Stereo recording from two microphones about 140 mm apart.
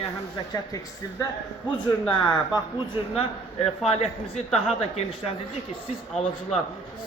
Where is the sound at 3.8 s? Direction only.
50° left (ahead or behind).